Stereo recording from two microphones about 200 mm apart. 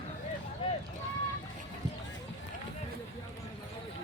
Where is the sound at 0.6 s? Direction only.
25° left (ahead or behind).